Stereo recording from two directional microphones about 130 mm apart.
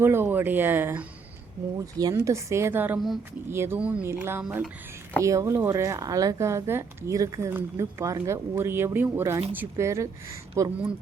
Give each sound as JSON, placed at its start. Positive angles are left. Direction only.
{"t": 0.0, "sound": "speech", "side_deg": -15}
{"t": 1.8, "sound": "a woman's voice", "side_deg": -30}